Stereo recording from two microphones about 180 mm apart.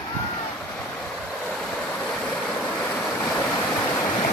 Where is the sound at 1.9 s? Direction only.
5° left (ahead or behind).